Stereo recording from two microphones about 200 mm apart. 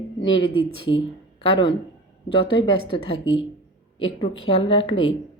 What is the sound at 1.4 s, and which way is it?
Speech, 25° left (ahead or behind).